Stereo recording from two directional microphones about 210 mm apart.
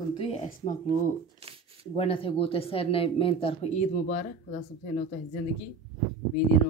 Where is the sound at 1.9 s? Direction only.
25° left (ahead or behind).